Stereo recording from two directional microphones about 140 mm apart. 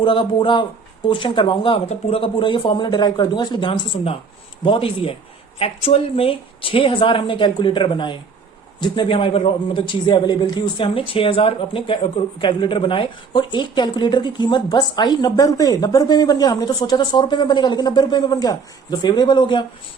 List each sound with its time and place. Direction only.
0.0 s a man's voice: 35° left (ahead or behind)